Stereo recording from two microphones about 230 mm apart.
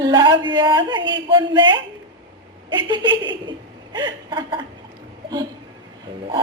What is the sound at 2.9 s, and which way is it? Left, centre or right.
Speech, right.